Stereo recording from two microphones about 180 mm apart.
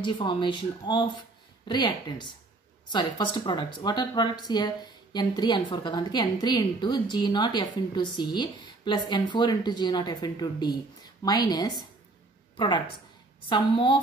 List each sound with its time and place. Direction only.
0.0 s speech: 25° left (ahead or behind)